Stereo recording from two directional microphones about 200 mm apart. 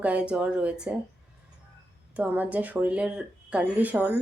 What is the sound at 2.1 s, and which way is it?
Speech, 10° right (ahead or behind).